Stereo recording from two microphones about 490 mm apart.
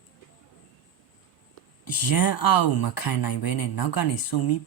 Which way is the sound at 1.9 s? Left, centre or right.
Left.